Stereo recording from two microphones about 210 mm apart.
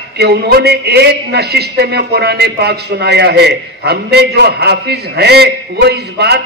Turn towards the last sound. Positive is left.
turn(degrees=-50)  # may be behind; listen again after turning